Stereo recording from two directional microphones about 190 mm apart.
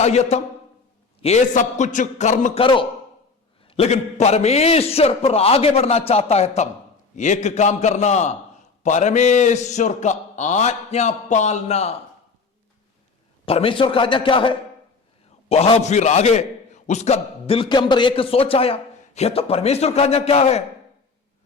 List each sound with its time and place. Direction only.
0.0 s a man's voice: 35° left (ahead or behind)
3.7 s a man's voice: 35° left (ahead or behind)
13.4 s a man's voice: 30° left (ahead or behind)